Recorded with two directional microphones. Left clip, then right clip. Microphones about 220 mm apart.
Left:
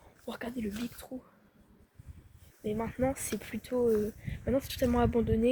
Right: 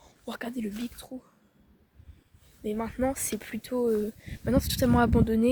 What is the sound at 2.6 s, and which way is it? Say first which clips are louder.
Speech: right 2 dB; 35° right (ahead or behind).